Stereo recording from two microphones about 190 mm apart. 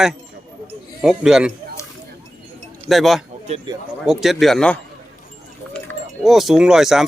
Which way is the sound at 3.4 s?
35° right (ahead or behind).